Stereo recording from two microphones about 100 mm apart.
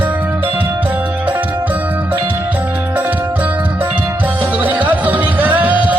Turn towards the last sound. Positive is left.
turn(degrees=-15)  # may be behind; listen again after turning